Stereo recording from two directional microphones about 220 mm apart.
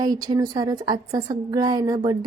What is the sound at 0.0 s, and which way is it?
A woman's voice, 15° right (ahead or behind).